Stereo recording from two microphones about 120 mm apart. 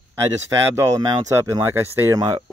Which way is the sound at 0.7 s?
25° right (ahead or behind).